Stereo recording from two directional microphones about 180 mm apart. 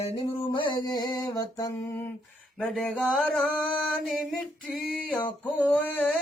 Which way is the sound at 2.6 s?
5° left (ahead or behind).